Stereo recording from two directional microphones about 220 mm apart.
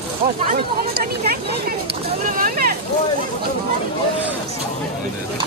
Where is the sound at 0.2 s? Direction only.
45° right (ahead or behind).